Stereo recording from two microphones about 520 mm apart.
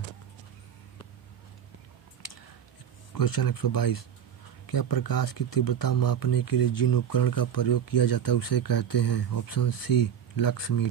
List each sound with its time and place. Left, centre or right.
3.2 s speech: left